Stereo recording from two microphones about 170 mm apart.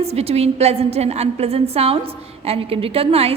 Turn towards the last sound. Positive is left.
turn(degrees=-35)  # may be behind; listen again after turning